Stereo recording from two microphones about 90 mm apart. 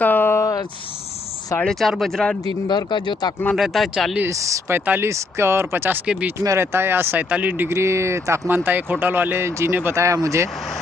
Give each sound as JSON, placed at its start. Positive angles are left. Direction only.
{"t": 0.0, "sound": "a sound", "side_deg": 25}
{"t": 0.4, "sound": "a sound", "side_deg": 50}
{"t": 1.6, "sound": "speech", "side_deg": 5}
{"t": 2.4, "sound": "speech", "side_deg": 55}
{"t": 3.5, "sound": "speech", "side_deg": 0}
{"t": 4.3, "sound": "speech", "side_deg": -35}
{"t": 4.7, "sound": "speech", "side_deg": -25}
{"t": 9.9, "sound": "speech", "side_deg": -35}